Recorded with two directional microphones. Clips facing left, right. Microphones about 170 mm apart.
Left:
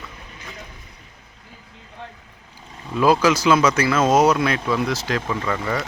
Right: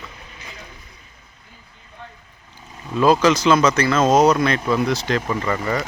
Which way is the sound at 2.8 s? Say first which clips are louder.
Right 1 dB; 5° left (ahead or behind).